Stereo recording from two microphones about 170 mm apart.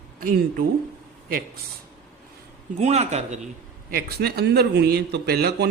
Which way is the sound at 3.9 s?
65° right (ahead or behind).